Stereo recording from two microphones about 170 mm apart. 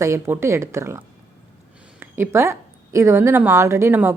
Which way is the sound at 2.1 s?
15° right (ahead or behind).